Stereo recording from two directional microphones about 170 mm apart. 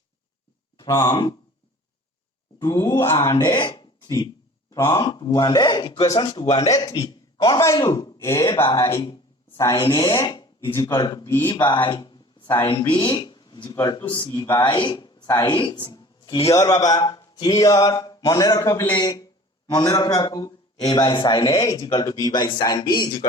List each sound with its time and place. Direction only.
0.8 s speech: 20° left (ahead or behind)
2.6 s speech: 25° left (ahead or behind)
9.6 s a woman's voice: 15° left (ahead or behind)